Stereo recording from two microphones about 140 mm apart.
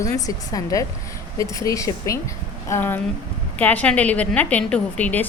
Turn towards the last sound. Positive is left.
turn(degrees=10)  # may be behind; listen again after turning